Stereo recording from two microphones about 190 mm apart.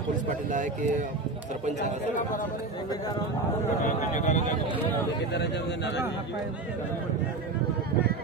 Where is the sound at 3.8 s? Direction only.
40° left (ahead or behind).